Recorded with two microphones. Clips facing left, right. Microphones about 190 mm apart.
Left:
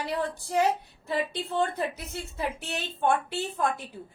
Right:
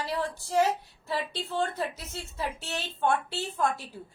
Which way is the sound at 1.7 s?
15° left (ahead or behind).